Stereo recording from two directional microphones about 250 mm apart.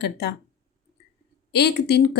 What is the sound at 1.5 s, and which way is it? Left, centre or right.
Speech, left.